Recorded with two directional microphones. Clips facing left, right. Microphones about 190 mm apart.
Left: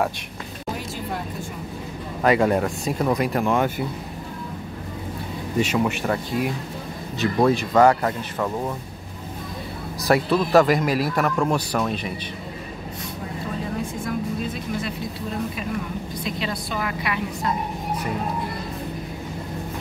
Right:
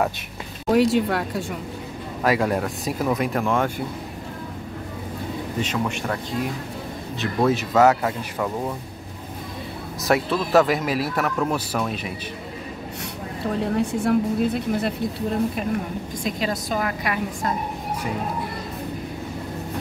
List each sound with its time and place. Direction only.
0.7 s speech: 75° right (ahead or behind)
2.2 s speech: centre (ahead or behind)
5.6 s speech: 10° left (ahead or behind)
7.2 s speech: 5° right (ahead or behind)
10.0 s speech: centre (ahead or behind)
13.6 s speech: 70° right (ahead or behind)
16.3 s a woman's voice: 40° right (ahead or behind)